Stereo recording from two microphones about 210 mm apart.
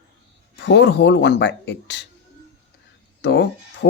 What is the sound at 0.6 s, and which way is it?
Speech, 55° left (ahead or behind).